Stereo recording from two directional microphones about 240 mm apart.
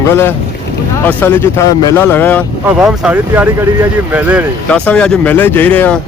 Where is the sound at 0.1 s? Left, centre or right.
Centre.